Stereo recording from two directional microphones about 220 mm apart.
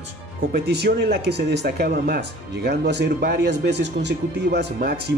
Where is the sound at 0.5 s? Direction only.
50° right (ahead or behind).